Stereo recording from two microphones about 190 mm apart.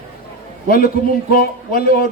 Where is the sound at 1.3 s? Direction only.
50° left (ahead or behind).